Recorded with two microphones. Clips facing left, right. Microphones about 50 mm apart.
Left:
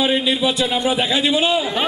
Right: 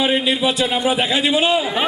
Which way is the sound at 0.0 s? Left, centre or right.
Centre.